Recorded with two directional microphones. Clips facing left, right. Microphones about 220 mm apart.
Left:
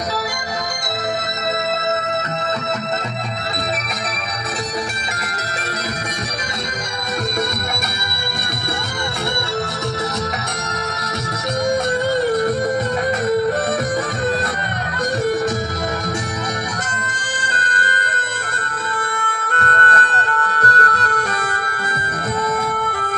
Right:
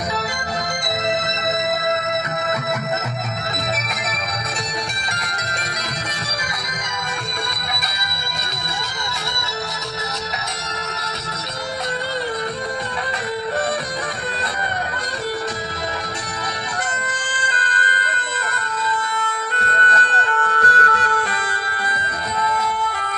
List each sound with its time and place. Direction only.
17.6 s music: 45° left (ahead or behind)
19.5 s music: 50° left (ahead or behind)